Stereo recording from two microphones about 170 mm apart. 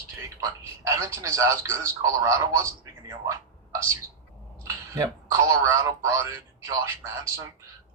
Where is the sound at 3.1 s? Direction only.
15° right (ahead or behind).